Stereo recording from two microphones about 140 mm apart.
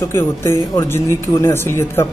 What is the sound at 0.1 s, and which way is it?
Speech, 20° left (ahead or behind).